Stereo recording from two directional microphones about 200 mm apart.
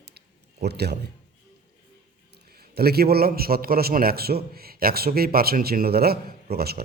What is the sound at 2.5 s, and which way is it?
A man's voice, 50° right (ahead or behind).